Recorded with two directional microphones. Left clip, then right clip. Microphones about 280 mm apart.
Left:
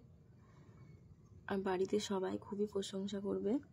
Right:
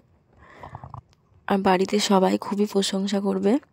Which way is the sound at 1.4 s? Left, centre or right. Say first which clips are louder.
Right 17 dB; right.